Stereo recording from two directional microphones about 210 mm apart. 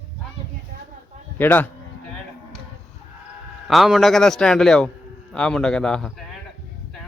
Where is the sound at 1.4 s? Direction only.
10° left (ahead or behind).